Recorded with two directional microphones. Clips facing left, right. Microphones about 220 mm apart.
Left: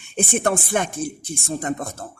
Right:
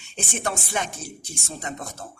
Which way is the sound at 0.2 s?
55° left (ahead or behind).